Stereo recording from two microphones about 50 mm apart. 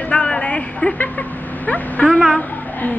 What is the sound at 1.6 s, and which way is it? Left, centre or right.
Speech, left.